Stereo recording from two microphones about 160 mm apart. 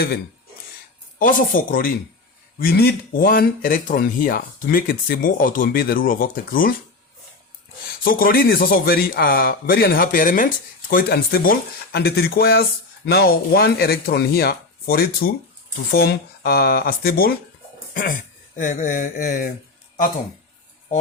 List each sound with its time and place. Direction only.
1.2 s speech: 60° left (ahead or behind)
2.6 s speech: 75° left (ahead or behind)
8.0 s a man's voice: 65° left (ahead or behind)
18.5 s speech: 55° left (ahead or behind)